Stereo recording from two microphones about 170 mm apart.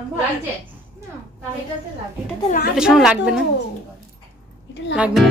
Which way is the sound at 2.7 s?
5° right (ahead or behind).